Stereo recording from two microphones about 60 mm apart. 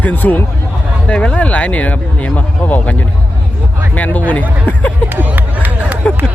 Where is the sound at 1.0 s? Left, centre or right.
Centre.